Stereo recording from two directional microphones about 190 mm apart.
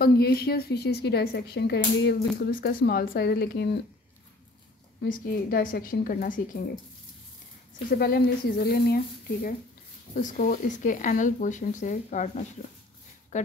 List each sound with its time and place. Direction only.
0.0 s a woman's voice: 55° left (ahead or behind)
5.0 s speech: 45° left (ahead or behind)
7.9 s speech: 55° left (ahead or behind)
13.3 s speech: 35° left (ahead or behind)